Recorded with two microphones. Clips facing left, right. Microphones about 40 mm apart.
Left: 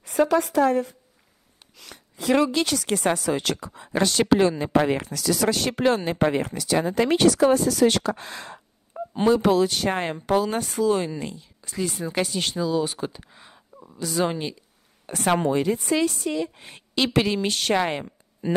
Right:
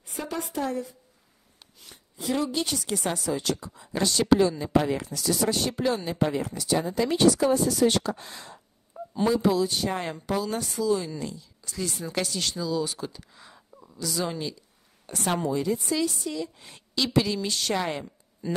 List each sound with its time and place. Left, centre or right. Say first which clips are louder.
0.0 s a woman's voice: left 13 dB; left
1.8 s speech: left 4 dB; left
2.9 s a woman's voice: left 5 dB; left
5.1 s speech: left 3 dB; left
8.9 s a sound: left 4 dB; left
9.3 s speech: left 5 dB; left
9.9 s a woman's voice: left 6 dB; left
11.1 s speech: left 3 dB; left
15.3 s a woman's voice: left 4 dB; left